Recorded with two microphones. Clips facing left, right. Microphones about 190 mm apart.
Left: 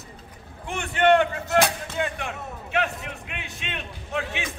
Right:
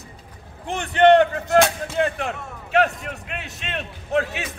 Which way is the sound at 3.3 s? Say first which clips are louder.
Right 6 dB; 40° right (ahead or behind).